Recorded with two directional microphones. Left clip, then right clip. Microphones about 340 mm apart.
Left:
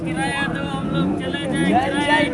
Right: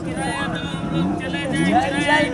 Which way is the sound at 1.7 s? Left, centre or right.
Right.